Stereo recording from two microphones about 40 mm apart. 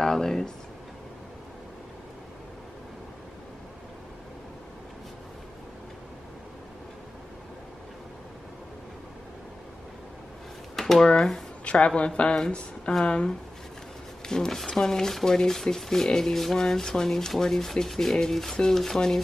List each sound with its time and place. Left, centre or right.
0.0 s speech: centre
10.8 s a sound: centre
11.6 s a woman's voice: left
14.2 s speech: centre